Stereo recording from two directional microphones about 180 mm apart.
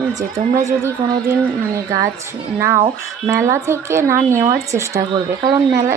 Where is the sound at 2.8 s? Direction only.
20° right (ahead or behind).